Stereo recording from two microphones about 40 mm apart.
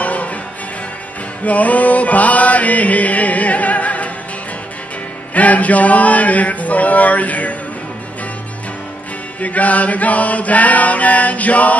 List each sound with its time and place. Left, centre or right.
0.0 s music: left
1.4 s chant: left
5.3 s mantra: left
9.4 s mantra: left